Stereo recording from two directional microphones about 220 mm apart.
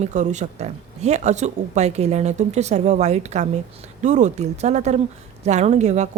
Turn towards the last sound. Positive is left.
turn(degrees=-30)  # may be behind; listen again after turning